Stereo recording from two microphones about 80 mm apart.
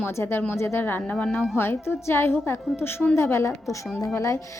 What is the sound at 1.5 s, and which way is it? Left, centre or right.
A woman's voice, left.